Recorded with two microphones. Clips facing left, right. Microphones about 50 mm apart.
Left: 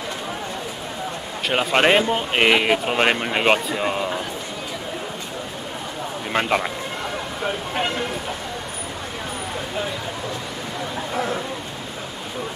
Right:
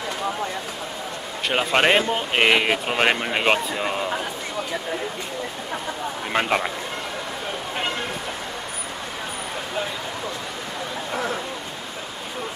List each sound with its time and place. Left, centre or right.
1.5 s speech: centre
6.3 s speech: centre